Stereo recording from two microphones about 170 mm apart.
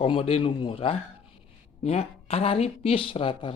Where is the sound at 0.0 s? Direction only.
35° left (ahead or behind).